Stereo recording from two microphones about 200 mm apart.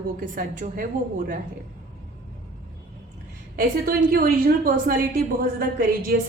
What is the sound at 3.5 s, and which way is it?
A woman's voice, 45° right (ahead or behind).